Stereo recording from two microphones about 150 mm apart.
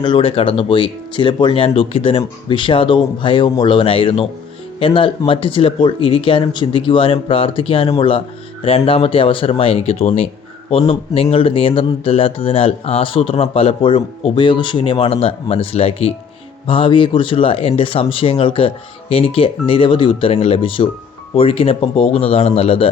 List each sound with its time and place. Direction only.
0.0 s speech: 35° left (ahead or behind)